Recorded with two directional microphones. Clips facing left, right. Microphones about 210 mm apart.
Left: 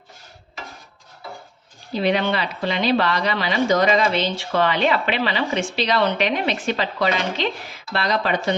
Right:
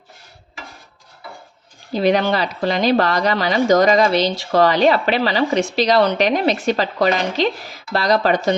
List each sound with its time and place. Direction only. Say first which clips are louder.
1.9 s speech: right 4 dB; 40° right (ahead or behind)